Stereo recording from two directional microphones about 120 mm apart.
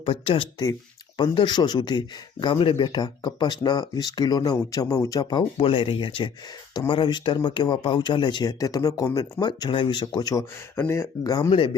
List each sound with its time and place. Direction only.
0.0 s speech: 50° left (ahead or behind)
8.5 s speech: 30° left (ahead or behind)
10.8 s speech: 20° left (ahead or behind)
11.5 s speech: 45° left (ahead or behind)